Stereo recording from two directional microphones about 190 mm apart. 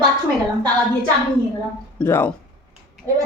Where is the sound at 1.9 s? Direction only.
10° left (ahead or behind).